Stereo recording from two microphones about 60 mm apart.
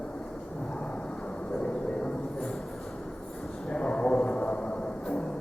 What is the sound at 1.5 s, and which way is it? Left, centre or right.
Vehicle, centre.